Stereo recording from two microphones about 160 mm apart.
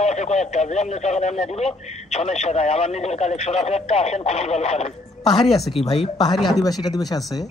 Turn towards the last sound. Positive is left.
turn(degrees=25)  # may be behind; listen again after turning